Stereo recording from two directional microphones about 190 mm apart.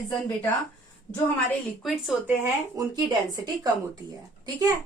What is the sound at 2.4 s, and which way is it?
A woman's voice, 20° right (ahead or behind).